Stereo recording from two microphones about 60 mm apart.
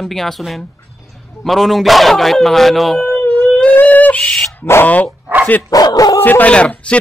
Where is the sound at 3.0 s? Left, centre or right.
Left.